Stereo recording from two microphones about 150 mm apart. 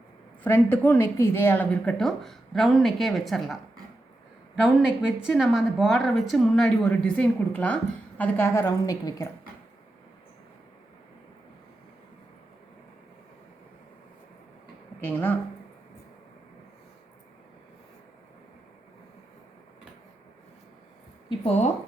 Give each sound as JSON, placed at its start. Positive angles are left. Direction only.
{"t": 0.4, "sound": "speech", "side_deg": 15}
{"t": 5.2, "sound": "a woman's voice", "side_deg": 0}
{"t": 15.0, "sound": "speech", "side_deg": 15}
{"t": 21.2, "sound": "speech", "side_deg": 45}